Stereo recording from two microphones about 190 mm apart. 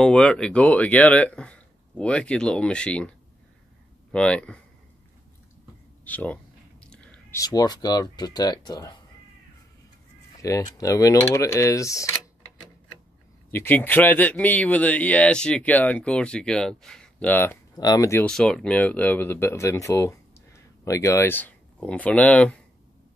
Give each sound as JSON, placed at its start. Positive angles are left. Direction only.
{"t": 0.0, "sound": "speech", "side_deg": 5}
{"t": 6.0, "sound": "a sound", "side_deg": 10}
{"t": 7.3, "sound": "speech", "side_deg": 20}
{"t": 10.4, "sound": "speech", "side_deg": 15}
{"t": 13.5, "sound": "speech", "side_deg": 10}
{"t": 18.2, "sound": "speech", "side_deg": 5}